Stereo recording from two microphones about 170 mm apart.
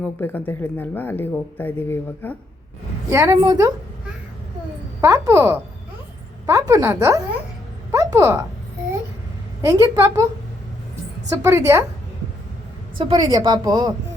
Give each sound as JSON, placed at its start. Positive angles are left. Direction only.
{"t": 0.0, "sound": "speech", "side_deg": 10}
{"t": 3.1, "sound": "speech", "side_deg": -15}
{"t": 4.9, "sound": "a woman's voice", "side_deg": -20}
{"t": 7.9, "sound": "a sound", "side_deg": -20}
{"t": 9.6, "sound": "speech", "side_deg": -20}
{"t": 11.3, "sound": "a woman's voice", "side_deg": -15}
{"t": 13.1, "sound": "speech", "side_deg": -25}